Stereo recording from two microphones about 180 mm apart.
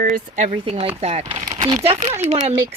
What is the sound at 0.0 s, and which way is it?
Speech, 45° right (ahead or behind).